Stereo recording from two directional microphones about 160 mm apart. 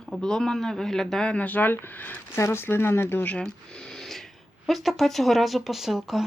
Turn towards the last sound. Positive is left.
turn(degrees=0)  # may be behind; listen again after turning